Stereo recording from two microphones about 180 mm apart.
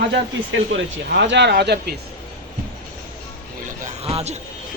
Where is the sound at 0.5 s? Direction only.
85° right; by 2.0 s 65° right (ahead or behind).